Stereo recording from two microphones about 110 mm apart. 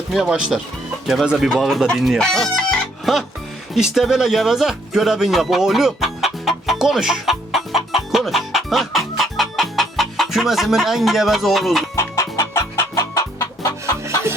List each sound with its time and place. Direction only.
0.1 s speech: 5° right (ahead or behind)
11.9 s chicken: 25° left (ahead or behind)